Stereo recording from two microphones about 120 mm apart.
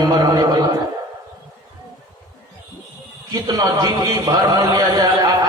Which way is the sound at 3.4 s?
35° right (ahead or behind).